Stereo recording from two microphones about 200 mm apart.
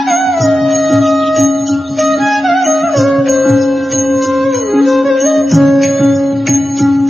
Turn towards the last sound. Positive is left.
turn(degrees=0)  # may be behind; listen again after turning